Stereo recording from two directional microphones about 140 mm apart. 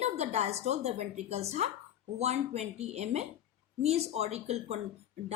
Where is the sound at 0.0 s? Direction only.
50° right (ahead or behind).